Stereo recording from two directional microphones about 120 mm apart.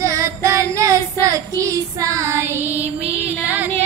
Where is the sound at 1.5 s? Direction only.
25° right (ahead or behind).